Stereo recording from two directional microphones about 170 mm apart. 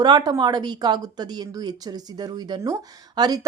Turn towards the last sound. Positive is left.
turn(degrees=-25)  # may be behind; listen again after turning